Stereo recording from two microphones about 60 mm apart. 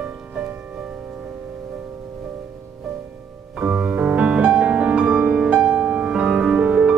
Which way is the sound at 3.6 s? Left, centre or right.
Right.